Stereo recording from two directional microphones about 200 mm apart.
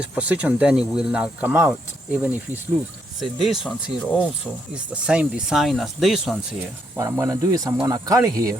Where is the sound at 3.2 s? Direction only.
Centre (ahead or behind).